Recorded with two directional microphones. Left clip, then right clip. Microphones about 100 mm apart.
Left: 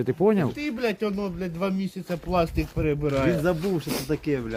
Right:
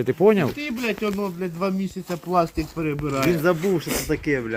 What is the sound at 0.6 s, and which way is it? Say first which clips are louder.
Speech: right 1 dB; 90° left.